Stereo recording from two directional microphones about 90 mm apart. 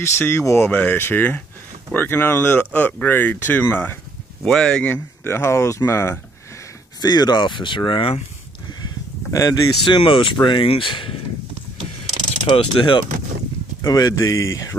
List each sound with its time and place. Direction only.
0.0 s speech: 30° left (ahead or behind)
0.7 s speech: 15° left (ahead or behind)
4.5 s speech: 10° left (ahead or behind)
4.8 s speech: 20° left (ahead or behind)
7.0 s speech: 50° left (ahead or behind); by 8.2 s 70° left (ahead or behind)
9.3 s speech: 40° left (ahead or behind)
9.8 s speech: 70° left (ahead or behind)
12.4 s speech: 70° left (ahead or behind)
13.8 s speech: 45° left (ahead or behind)